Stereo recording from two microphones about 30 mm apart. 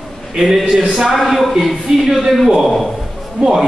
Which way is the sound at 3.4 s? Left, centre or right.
Centre.